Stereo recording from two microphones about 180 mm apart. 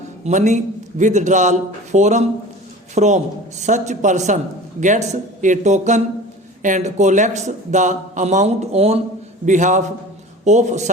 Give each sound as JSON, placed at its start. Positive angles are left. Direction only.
{"t": 0.3, "sound": "a man's voice", "side_deg": -40}